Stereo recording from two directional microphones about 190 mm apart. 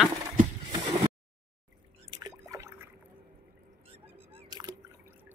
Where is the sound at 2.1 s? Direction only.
20° right (ahead or behind).